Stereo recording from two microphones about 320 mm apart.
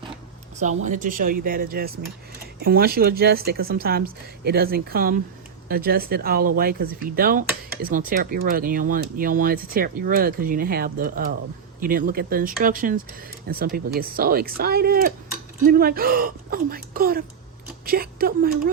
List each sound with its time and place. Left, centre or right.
0.9 s speech: right